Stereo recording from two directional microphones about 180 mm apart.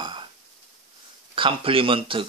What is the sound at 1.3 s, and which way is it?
Speech, 30° right (ahead or behind).